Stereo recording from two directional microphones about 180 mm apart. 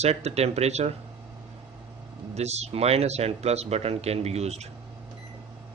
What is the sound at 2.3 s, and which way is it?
Speech, 35° right (ahead or behind).